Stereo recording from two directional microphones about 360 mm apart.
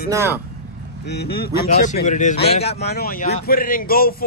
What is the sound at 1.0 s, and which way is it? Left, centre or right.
Speech, left.